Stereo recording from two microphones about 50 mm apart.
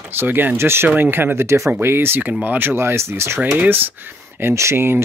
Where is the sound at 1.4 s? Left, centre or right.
Right.